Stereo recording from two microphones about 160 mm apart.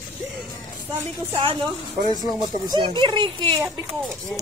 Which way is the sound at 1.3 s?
30° right (ahead or behind).